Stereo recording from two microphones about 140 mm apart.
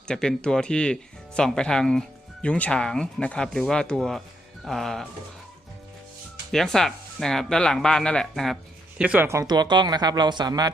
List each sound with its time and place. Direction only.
0.1 s speech: 5° left (ahead or behind)
6.5 s speech: 5° left (ahead or behind)
9.0 s speech: 10° right (ahead or behind); by 10.7 s 30° right (ahead or behind)